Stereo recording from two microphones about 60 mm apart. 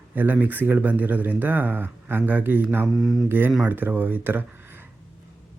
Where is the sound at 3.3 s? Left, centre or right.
Right.